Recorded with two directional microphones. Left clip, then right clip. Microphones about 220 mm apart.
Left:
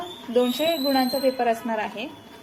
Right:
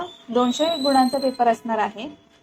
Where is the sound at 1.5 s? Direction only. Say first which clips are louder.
Right 4 dB; 20° right (ahead or behind).